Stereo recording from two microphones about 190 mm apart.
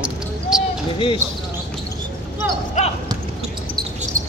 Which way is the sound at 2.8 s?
40° left (ahead or behind).